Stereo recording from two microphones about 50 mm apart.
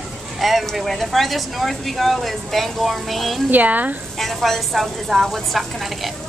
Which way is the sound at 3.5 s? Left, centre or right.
Right.